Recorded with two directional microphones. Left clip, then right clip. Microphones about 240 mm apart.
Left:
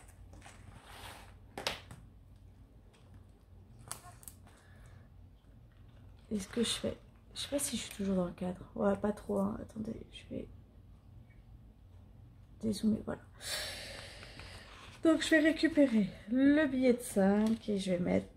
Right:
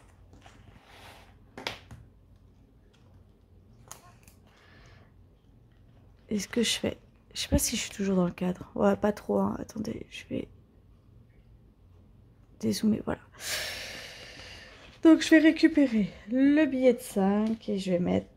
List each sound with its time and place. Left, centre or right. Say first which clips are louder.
6.2 s speech: right 7 dB; right
12.5 s speech: right 6 dB; right